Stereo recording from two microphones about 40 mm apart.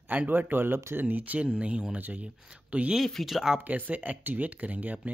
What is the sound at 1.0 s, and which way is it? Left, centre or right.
Speech, right.